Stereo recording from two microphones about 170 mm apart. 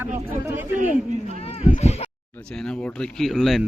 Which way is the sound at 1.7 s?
40° left (ahead or behind).